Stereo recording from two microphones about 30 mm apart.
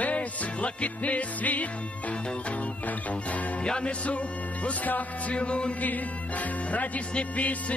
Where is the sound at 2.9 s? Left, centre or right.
Left.